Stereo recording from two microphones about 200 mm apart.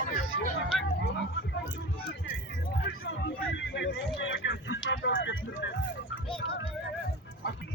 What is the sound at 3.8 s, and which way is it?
Speech, 65° left (ahead or behind).